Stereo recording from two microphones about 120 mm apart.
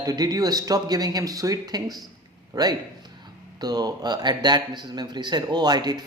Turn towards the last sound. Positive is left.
turn(degrees=-35)  # may be behind; listen again after turning